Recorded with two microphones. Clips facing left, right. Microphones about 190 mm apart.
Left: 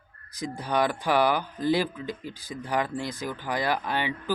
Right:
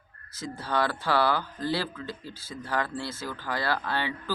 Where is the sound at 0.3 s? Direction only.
15° left (ahead or behind).